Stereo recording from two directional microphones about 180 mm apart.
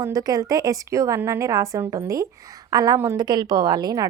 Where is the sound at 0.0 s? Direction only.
20° right (ahead or behind).